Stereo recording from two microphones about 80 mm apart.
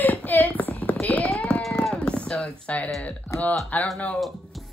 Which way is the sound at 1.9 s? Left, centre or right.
Centre.